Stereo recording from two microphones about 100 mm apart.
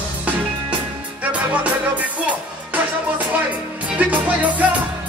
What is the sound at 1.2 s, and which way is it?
Music, 15° right (ahead or behind).